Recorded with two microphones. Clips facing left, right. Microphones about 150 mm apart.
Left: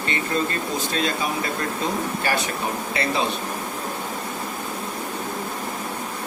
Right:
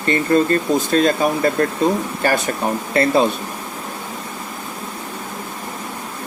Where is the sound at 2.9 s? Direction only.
50° right (ahead or behind).